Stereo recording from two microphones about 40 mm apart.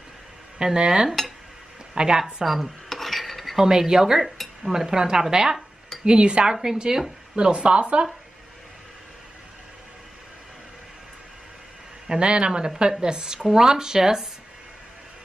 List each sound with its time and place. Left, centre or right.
0.6 s a woman's voice: centre
2.4 s speech: centre
2.9 s filing: centre
3.5 s a woman's voice: centre
12.1 s a woman's voice: right
13.4 s speech: centre